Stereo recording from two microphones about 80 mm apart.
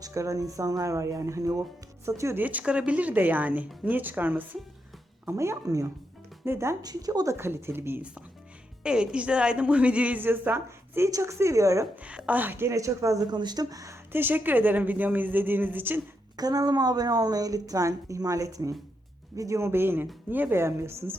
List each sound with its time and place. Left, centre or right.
0.0 s a woman's voice: right
2.4 s speech: centre
5.3 s a woman's voice: right
6.4 s speech: right
6.8 s a woman's voice: right
7.3 s a woman's voice: right
8.8 s a woman's voice: centre; by 11.9 s right
12.0 s speech: centre
12.7 s a woman's voice: right
13.3 s speech: right
14.1 s speech: right
16.4 s a woman's voice: right